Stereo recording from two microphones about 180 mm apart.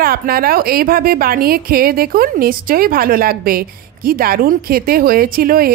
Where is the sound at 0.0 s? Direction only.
55° right (ahead or behind).